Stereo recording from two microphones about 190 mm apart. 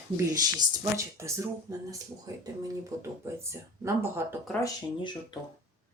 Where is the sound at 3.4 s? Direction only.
15° right (ahead or behind).